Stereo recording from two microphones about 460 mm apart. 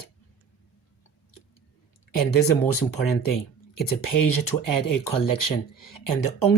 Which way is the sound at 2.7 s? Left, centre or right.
Left.